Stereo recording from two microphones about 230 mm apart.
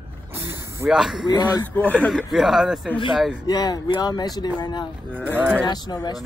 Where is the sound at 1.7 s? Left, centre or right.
Centre.